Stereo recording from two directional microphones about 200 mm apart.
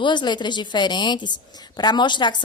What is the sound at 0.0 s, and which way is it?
A woman's voice, 20° left (ahead or behind).